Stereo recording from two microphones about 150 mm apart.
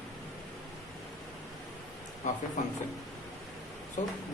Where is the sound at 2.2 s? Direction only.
55° left (ahead or behind).